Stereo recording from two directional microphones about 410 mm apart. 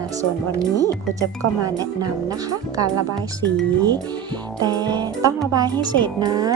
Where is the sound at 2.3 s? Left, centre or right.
Centre.